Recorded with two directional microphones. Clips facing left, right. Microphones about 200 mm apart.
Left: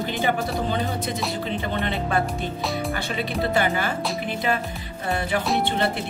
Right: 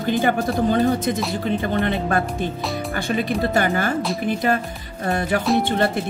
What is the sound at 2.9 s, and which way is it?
Speech, 45° right (ahead or behind).